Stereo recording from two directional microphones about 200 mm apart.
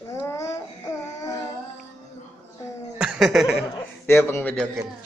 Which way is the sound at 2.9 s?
5° right (ahead or behind).